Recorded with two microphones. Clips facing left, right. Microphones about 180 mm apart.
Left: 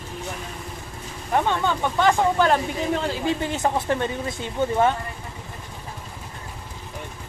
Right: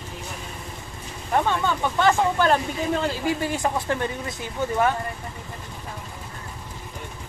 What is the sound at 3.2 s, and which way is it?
Speech, 25° left (ahead or behind).